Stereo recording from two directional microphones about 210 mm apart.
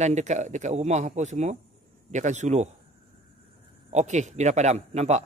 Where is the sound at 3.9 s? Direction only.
35° right (ahead or behind).